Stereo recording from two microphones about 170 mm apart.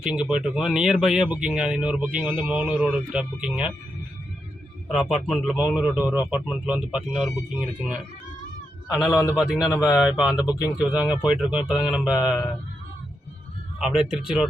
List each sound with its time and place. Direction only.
0.0 s speech: 5° right (ahead or behind)
4.9 s speech: centre (ahead or behind)
10.3 s speech: 20° left (ahead or behind)
10.8 s speech: 5° right (ahead or behind)
13.7 s speech: 5° right (ahead or behind)